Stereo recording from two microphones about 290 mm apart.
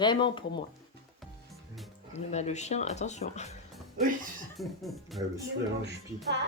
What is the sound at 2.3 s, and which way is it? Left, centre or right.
Speech, left.